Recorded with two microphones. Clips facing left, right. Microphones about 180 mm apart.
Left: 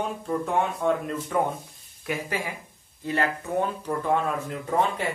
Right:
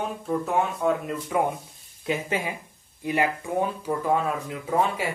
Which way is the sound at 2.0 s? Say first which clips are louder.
Right 3 dB; 20° right (ahead or behind).